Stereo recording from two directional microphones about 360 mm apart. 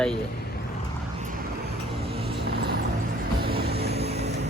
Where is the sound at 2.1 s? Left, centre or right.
Centre.